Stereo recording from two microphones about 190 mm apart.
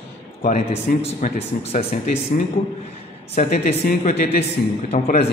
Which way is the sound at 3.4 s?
35° left (ahead or behind).